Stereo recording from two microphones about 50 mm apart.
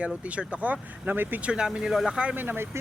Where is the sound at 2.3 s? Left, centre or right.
Right.